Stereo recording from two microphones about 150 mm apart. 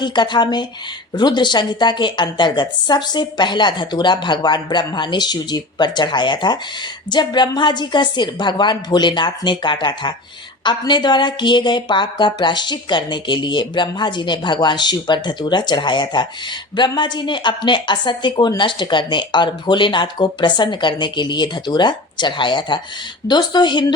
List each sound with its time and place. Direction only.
0.0 s a woman's voice: 30° left (ahead or behind)